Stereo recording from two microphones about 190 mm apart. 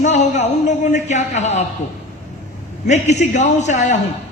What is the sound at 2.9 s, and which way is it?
A man's voice, 40° left (ahead or behind).